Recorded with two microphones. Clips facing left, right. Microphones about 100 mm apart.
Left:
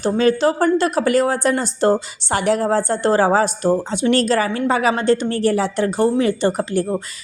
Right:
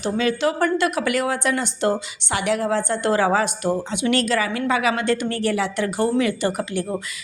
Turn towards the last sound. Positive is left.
turn(degrees=35)  # may be behind; listen again after turning